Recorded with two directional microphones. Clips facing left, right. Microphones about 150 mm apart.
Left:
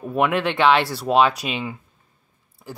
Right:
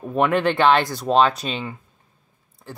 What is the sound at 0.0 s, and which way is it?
Speech, 5° left (ahead or behind).